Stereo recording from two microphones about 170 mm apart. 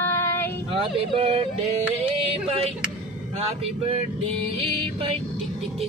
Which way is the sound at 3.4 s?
35° right (ahead or behind).